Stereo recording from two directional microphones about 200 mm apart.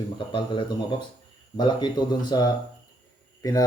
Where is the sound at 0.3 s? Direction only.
25° left (ahead or behind).